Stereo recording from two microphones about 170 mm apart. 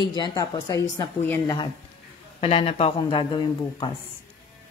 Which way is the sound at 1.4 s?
25° left (ahead or behind).